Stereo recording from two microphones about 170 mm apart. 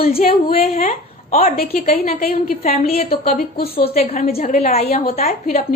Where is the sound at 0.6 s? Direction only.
40° left (ahead or behind).